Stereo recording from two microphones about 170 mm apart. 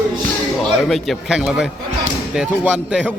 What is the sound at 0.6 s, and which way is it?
A man's voice, centre (ahead or behind).